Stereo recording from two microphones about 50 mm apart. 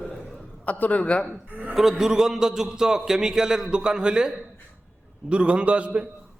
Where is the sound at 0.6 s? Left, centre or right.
Left.